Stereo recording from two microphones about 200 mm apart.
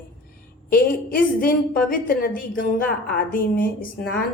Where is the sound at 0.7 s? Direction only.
45° left (ahead or behind).